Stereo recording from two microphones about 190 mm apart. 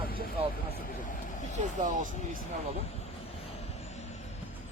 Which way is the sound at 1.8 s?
40° right (ahead or behind).